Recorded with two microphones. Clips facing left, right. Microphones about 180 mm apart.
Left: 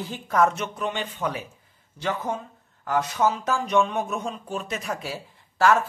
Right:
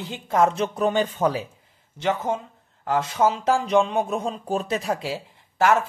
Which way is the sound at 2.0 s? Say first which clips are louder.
Right 4 dB; 25° right (ahead or behind).